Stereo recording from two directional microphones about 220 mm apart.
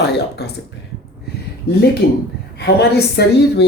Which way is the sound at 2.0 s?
45° left (ahead or behind).